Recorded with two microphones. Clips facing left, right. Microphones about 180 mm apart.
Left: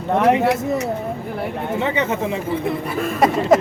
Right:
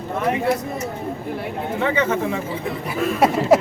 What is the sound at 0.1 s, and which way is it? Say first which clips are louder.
Speech: left 5 dB; 75° left (ahead or behind).